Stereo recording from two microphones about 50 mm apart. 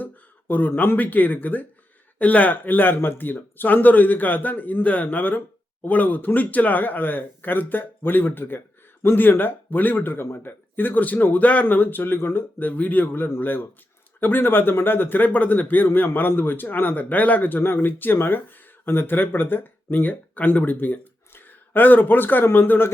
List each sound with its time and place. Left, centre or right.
0.0 s a sound: left
0.7 s speech: left
0.9 s speech: left
11.6 s speech: left